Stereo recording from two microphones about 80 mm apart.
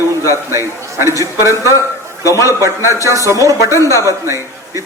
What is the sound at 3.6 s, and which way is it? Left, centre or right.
Speech, left.